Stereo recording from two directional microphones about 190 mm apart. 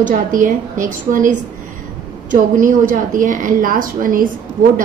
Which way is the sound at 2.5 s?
45° right (ahead or behind).